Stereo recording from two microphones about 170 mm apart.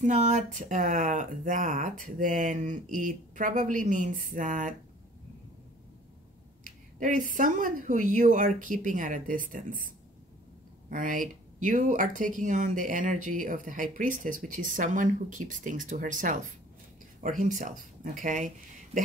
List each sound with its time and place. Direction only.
0.0 s speech: 45° right (ahead or behind)
6.6 s a sound: 50° right (ahead or behind)
7.3 s speech: 50° right (ahead or behind)
10.9 s speech: 50° right (ahead or behind)